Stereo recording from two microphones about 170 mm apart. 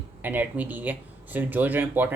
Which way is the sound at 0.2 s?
10° right (ahead or behind).